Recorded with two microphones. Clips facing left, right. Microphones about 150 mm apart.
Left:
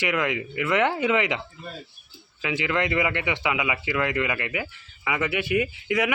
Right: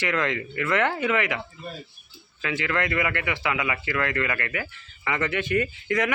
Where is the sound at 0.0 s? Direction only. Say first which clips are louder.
Left 1 dB; 10° left (ahead or behind).